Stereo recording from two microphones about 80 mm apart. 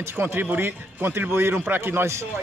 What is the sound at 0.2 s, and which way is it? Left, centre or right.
A man's voice, right.